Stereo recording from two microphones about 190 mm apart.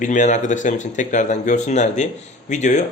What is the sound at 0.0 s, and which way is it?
A man's voice, 40° left (ahead or behind).